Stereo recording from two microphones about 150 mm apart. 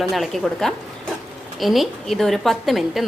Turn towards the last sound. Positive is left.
turn(degrees=0)  # may be behind; listen again after turning